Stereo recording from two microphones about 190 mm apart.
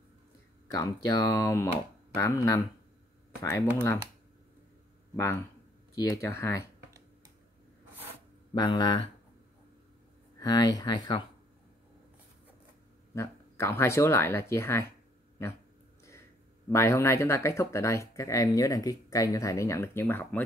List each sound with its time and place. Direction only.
0.7 s speech: 20° left (ahead or behind)
5.1 s speech: 10° left (ahead or behind)
8.5 s speech: 25° left (ahead or behind)
10.4 s speech: 20° left (ahead or behind)
13.1 s speech: 15° left (ahead or behind)
16.6 s speech: 15° left (ahead or behind)